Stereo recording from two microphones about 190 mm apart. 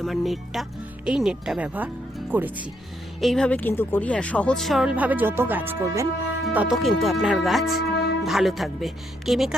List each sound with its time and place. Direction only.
0.0 s speech: centre (ahead or behind)
3.2 s speech: centre (ahead or behind)
7.8 s music: 60° left (ahead or behind)
8.2 s speech: centre (ahead or behind)